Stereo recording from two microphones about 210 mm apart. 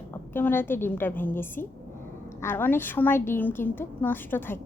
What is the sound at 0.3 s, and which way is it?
A woman's voice, 10° left (ahead or behind).